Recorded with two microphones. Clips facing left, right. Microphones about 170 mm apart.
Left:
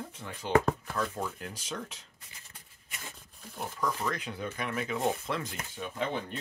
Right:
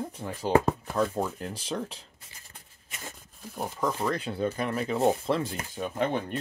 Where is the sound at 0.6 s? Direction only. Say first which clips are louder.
Right 5 dB; 25° right (ahead or behind).